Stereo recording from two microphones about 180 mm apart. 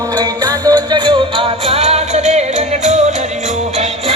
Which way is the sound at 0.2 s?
20° right (ahead or behind).